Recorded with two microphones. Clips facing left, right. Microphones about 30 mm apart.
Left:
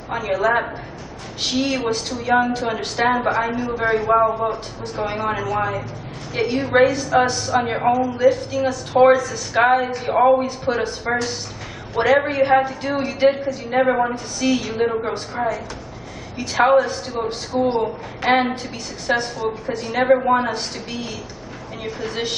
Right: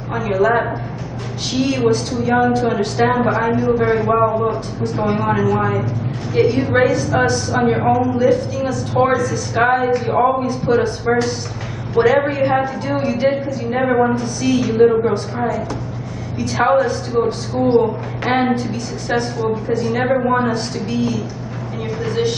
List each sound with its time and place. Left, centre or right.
0.1 s a woman's voice: centre
16.3 s a woman's voice: centre
18.2 s a woman's voice: centre